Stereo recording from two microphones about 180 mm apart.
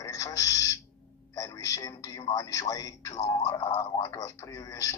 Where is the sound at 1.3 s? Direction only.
20° left (ahead or behind).